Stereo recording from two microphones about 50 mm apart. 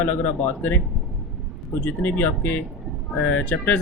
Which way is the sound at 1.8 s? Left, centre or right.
Left.